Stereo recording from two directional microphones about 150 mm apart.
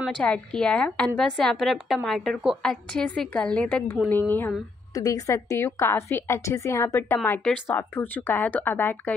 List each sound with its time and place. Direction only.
0.0 s a woman's voice: 5° left (ahead or behind)
4.9 s a woman's voice: 25° left (ahead or behind)